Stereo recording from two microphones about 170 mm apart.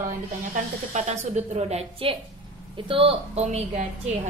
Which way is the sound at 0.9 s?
45° right (ahead or behind).